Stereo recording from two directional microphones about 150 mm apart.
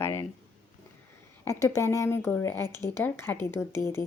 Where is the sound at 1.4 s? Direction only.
20° left (ahead or behind).